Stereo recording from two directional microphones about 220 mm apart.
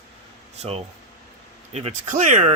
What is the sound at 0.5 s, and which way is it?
Speech, 30° right (ahead or behind).